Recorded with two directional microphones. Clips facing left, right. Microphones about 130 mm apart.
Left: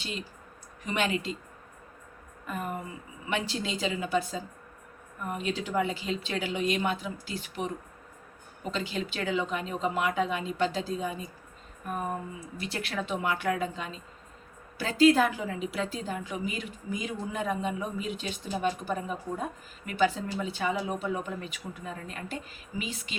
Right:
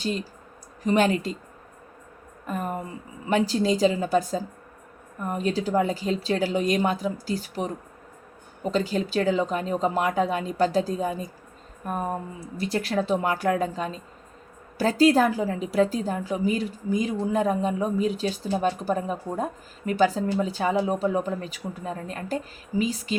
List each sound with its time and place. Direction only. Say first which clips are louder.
0.9 s speech: right 8 dB; 40° right (ahead or behind)
2.5 s speech: right 5 dB; 40° right (ahead or behind)